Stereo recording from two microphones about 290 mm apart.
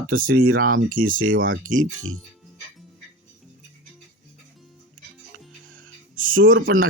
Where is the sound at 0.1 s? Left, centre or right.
Right.